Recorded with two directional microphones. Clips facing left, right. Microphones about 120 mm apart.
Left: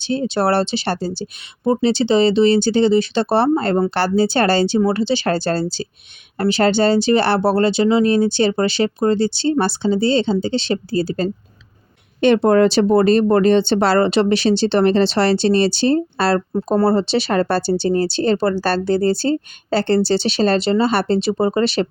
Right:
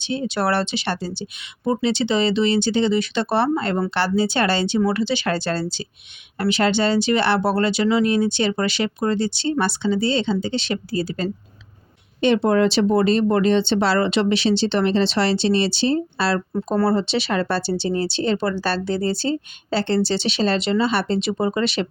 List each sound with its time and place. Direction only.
0.1 s speech: 35° left (ahead or behind)
12.2 s speech: 50° left (ahead or behind)
16.5 s speech: 30° left (ahead or behind)